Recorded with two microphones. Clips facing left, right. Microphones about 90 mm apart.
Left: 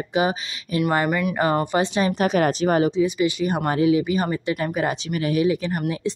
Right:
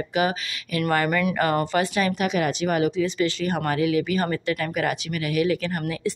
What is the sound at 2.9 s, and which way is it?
Speech, 15° left (ahead or behind).